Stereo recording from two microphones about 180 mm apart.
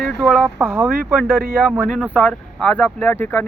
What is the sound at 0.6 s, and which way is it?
Speech, 10° right (ahead or behind).